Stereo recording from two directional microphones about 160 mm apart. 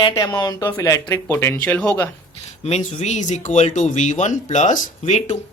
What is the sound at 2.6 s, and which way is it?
Speech, 45° left (ahead or behind).